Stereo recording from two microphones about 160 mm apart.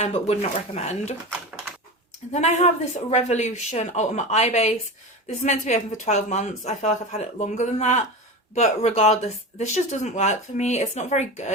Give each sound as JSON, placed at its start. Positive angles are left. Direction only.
{"t": 0.0, "sound": "speech", "side_deg": 40}
{"t": 2.3, "sound": "speech", "side_deg": 45}